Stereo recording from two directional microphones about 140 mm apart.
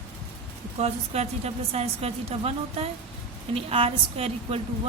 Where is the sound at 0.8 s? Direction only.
50° right (ahead or behind).